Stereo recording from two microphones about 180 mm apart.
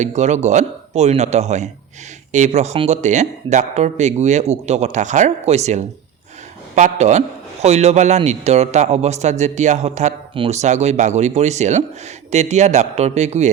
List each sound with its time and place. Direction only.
0.0 s a man's voice: 40° right (ahead or behind)